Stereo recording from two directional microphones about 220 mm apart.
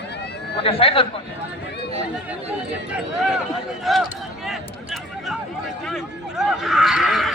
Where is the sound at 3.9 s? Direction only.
Centre (ahead or behind).